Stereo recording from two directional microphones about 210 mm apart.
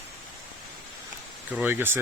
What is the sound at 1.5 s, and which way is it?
Speech, 10° right (ahead or behind).